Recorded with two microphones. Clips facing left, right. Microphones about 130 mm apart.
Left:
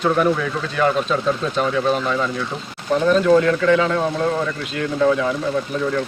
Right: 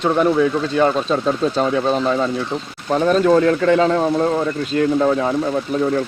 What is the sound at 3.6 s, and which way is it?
Speech, 40° right (ahead or behind).